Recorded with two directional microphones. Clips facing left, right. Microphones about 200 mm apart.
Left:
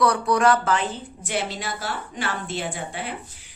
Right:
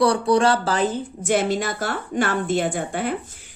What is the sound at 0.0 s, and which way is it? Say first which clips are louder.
A woman's voice: right 2 dB; 30° right (ahead or behind).